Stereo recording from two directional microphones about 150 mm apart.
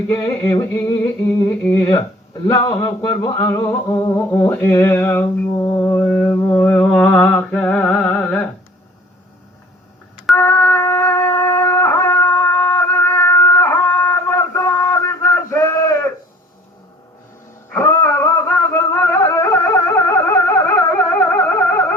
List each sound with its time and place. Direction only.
0.1 s speech: 20° left (ahead or behind)
10.3 s shofar: 15° left (ahead or behind)
17.7 s music: 15° left (ahead or behind)